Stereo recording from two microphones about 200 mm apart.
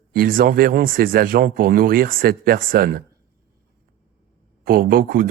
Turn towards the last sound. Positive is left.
turn(degrees=-45)  # may be behind; listen again after turning